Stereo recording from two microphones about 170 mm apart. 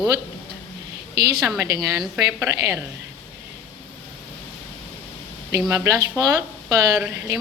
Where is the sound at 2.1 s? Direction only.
10° right (ahead or behind).